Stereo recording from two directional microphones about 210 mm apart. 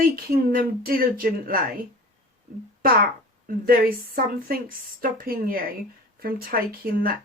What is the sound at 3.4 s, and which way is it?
Speech, 45° right (ahead or behind).